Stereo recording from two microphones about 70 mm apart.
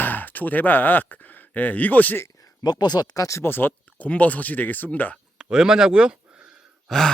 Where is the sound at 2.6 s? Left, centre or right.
Left.